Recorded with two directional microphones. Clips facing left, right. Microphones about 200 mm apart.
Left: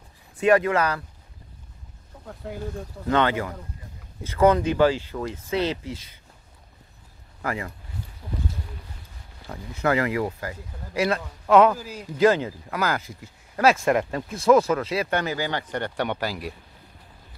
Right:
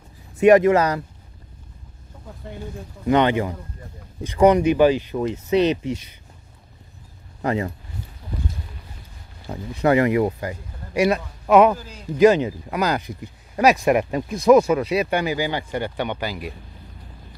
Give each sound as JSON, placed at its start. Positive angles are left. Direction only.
{"t": 0.4, "sound": "speech", "side_deg": -20}
{"t": 2.2, "sound": "speech", "side_deg": 0}
{"t": 3.1, "sound": "speech", "side_deg": -20}
{"t": 7.4, "sound": "speech", "side_deg": -25}
{"t": 9.5, "sound": "speech", "side_deg": -20}